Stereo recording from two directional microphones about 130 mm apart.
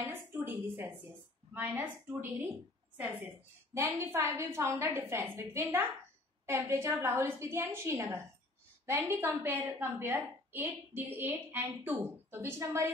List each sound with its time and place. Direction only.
0.0 s a sound: 15° right (ahead or behind)
1.5 s a woman's voice: 15° right (ahead or behind)
3.7 s a woman's voice: 20° right (ahead or behind)